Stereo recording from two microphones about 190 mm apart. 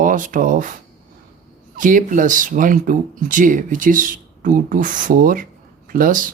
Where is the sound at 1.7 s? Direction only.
45° right (ahead or behind).